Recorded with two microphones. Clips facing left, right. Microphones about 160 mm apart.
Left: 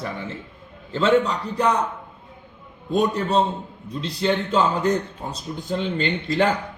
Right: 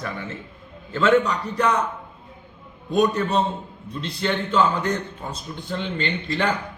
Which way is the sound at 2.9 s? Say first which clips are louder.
Even; 30° left (ahead or behind).